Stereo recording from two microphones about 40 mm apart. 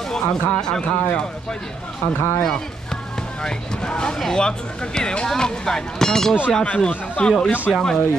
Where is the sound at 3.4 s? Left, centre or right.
Centre.